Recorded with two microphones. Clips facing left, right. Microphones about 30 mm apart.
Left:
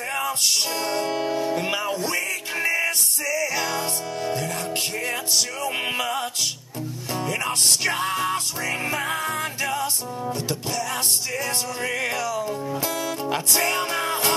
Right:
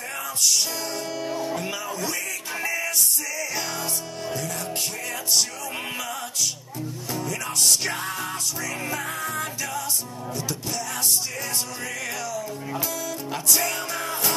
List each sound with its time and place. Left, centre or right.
0.1 s music: left
3.3 s music: centre
5.9 s music: left
11.8 s music: left